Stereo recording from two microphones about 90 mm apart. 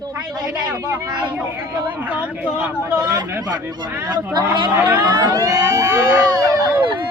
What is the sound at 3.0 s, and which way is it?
Speech, 50° right (ahead or behind).